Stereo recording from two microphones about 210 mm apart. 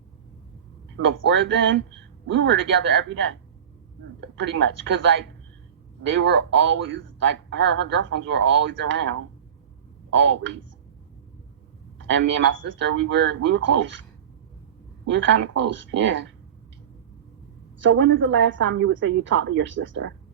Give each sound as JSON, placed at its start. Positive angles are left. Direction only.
{"t": 0.9, "sound": "speech", "side_deg": -60}
{"t": 4.4, "sound": "speech", "side_deg": -60}
{"t": 10.2, "sound": "speech", "side_deg": -60}
{"t": 12.0, "sound": "speech", "side_deg": -60}
{"t": 15.1, "sound": "speech", "side_deg": -60}
{"t": 17.8, "sound": "speech", "side_deg": -60}